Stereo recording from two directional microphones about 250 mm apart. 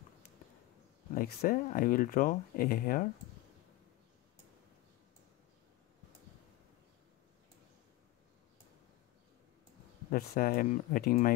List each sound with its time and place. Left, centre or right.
1.1 s speech: left
10.1 s speech: left